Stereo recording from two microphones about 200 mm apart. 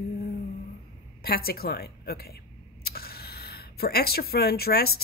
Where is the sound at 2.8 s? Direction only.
50° left (ahead or behind).